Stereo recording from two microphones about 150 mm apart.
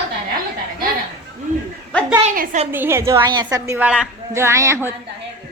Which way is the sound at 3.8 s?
5° right (ahead or behind).